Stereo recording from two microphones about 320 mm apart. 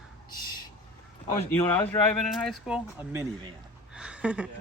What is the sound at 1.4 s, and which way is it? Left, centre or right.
Speech, centre.